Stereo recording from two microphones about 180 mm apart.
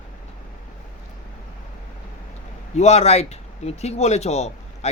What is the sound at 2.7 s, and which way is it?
Speech, 35° left (ahead or behind).